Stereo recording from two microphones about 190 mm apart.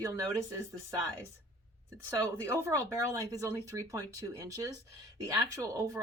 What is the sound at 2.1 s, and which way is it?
Speech, 15° right (ahead or behind).